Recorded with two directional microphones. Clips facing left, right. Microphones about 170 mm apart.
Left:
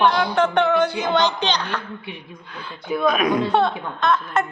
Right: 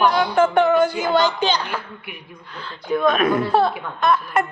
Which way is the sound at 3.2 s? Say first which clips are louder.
Right 1 dB; 15° left (ahead or behind).